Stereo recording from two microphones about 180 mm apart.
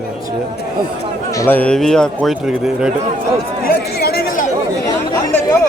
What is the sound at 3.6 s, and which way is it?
Chatter, 60° left (ahead or behind).